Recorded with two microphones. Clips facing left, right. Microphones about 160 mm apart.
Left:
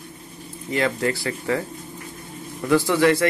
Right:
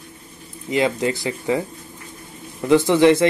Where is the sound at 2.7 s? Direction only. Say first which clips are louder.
Right 4 dB; 20° right (ahead or behind).